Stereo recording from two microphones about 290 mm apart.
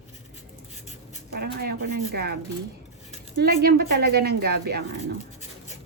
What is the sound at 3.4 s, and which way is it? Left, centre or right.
Speech, right.